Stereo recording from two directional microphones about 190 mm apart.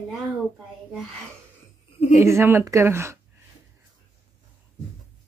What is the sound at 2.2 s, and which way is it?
Speech, 15° right (ahead or behind).